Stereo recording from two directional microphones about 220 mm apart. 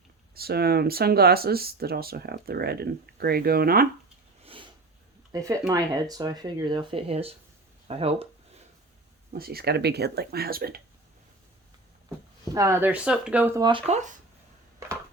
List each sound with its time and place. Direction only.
0.3 s speech: 45° right (ahead or behind)
4.4 s a sound: 25° right (ahead or behind)
5.3 s speech: 15° right (ahead or behind)
9.3 s speech: 45° right (ahead or behind)
12.5 s speech: 10° right (ahead or behind); by 14.1 s 30° right (ahead or behind)